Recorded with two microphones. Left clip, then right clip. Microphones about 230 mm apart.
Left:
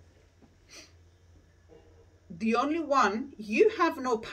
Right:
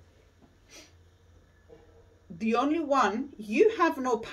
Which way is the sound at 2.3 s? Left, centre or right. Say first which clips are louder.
Right 1 dB; centre.